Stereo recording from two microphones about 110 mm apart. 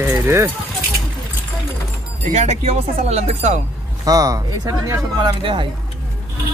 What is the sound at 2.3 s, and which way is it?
Speech, 90° right.